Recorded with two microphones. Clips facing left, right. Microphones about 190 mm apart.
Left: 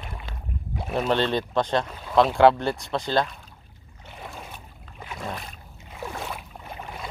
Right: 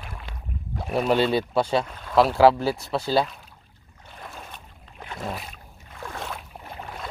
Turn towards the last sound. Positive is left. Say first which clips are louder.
# left 1 dB
turn(degrees=5)  # may be behind; listen again after turning